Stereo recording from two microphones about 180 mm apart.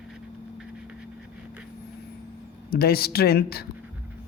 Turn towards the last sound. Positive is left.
turn(degrees=60)  # may be behind; listen again after turning